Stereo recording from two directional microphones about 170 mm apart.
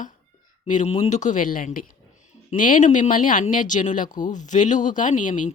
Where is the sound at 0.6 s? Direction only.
45° left (ahead or behind).